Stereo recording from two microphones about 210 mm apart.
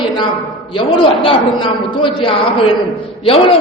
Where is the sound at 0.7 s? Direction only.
25° left (ahead or behind).